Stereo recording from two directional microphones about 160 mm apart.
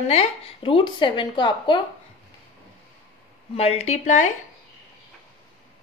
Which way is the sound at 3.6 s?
40° left (ahead or behind).